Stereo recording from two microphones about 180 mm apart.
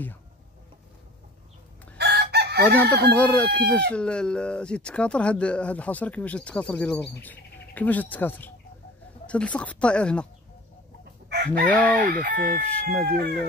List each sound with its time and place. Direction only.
2.0 s chicken: 65° right (ahead or behind)
2.8 s speech: 10° left (ahead or behind)
11.2 s chicken: 60° right (ahead or behind)
11.6 s speech: 10° left (ahead or behind)
12.1 s chicken: 45° right (ahead or behind)
12.7 s speech: 5° left (ahead or behind)